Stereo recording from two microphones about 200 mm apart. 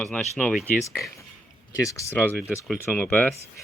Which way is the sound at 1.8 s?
15° left (ahead or behind).